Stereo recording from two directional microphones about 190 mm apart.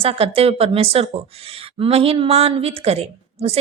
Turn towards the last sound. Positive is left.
turn(degrees=-30)  # may be behind; listen again after turning